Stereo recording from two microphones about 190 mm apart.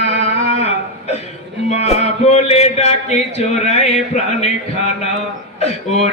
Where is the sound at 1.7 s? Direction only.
35° left (ahead or behind).